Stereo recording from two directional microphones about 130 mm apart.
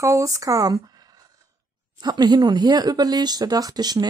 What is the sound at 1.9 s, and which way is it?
Speech, 35° right (ahead or behind).